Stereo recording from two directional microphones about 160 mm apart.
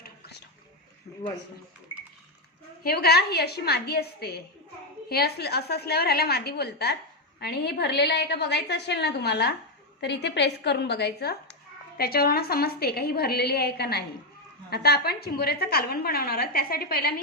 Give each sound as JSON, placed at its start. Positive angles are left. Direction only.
{"t": 0.0, "sound": "a sound", "side_deg": 90}
{"t": 2.8, "sound": "a woman's voice", "side_deg": 80}
{"t": 11.9, "sound": "a woman's voice", "side_deg": 75}